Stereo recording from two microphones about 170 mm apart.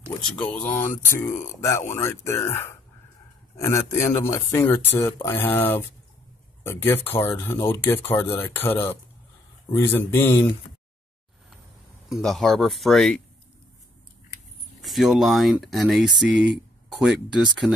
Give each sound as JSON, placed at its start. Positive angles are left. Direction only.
{"t": 0.2, "sound": "speech", "side_deg": 5}
{"t": 12.1, "sound": "speech", "side_deg": 0}
{"t": 14.8, "sound": "speech", "side_deg": 0}